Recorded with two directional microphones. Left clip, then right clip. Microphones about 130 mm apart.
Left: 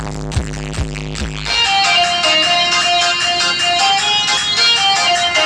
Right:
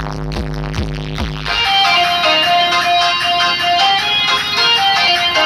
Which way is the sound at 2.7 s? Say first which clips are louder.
Right 1 dB; 40° left (ahead or behind).